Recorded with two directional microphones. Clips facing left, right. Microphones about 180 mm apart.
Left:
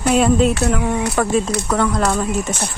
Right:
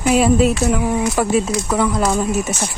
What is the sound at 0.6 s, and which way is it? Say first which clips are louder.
Speech: right 1 dB; 10° right (ahead or behind).